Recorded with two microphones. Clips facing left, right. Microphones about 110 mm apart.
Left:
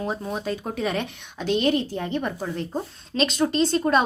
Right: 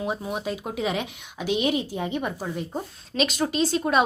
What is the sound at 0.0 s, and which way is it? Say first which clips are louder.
A woman's voice: even; 10° right (ahead or behind).